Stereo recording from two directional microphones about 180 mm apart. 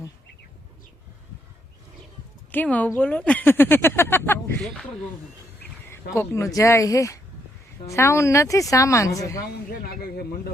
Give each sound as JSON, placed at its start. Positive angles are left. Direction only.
{"t": 2.5, "sound": "speech", "side_deg": 10}
{"t": 5.9, "sound": "speech", "side_deg": 15}
{"t": 9.5, "sound": "speech", "side_deg": 60}